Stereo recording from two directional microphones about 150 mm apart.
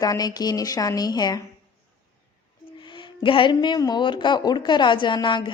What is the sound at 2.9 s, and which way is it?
Speech, 35° left (ahead or behind).